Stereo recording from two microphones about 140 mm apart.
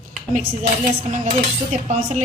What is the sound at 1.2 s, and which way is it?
Speech, 55° right (ahead or behind).